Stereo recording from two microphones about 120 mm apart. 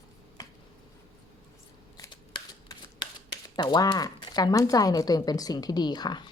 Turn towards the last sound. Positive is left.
turn(degrees=35)  # may be behind; listen again after turning